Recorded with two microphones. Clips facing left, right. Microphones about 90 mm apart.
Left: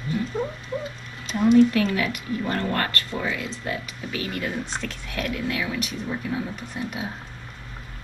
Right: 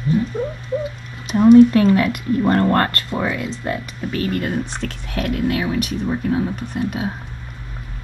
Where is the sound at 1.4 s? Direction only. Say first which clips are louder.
Right 8 dB; 40° right (ahead or behind).